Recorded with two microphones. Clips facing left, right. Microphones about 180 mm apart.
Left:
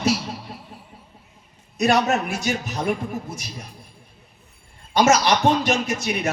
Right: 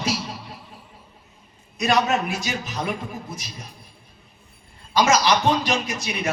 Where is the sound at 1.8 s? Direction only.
45° left (ahead or behind).